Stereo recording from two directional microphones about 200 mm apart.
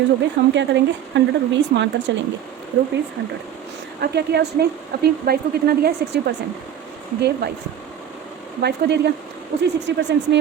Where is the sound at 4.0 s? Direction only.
55° right (ahead or behind).